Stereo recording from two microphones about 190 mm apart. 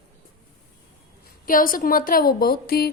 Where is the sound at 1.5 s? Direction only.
45° left (ahead or behind).